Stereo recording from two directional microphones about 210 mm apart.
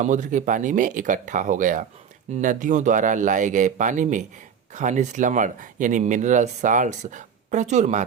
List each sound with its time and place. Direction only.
0.0 s speech: 35° right (ahead or behind)